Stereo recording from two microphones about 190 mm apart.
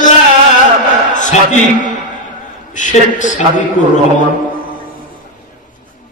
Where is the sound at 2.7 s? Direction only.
40° left (ahead or behind).